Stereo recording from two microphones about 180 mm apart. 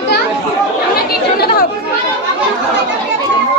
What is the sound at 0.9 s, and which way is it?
Chatter, 60° left (ahead or behind).